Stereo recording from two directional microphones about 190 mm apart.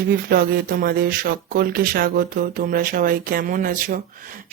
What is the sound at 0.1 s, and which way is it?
Speech, 50° right (ahead or behind).